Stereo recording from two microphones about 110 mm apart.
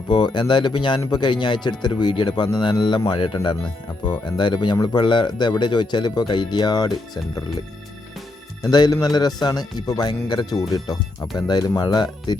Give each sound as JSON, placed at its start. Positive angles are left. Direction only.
{"t": 0.1, "sound": "a man's voice", "side_deg": 45}
{"t": 8.6, "sound": "speech", "side_deg": 35}